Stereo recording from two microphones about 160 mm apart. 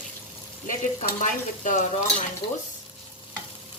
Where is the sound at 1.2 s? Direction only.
50° left (ahead or behind).